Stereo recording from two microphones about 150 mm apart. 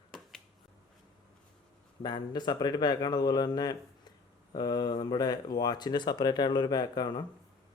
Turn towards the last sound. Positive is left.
turn(degrees=30)  # may be behind; listen again after turning